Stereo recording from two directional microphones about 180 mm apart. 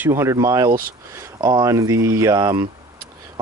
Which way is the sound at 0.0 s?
15° right (ahead or behind).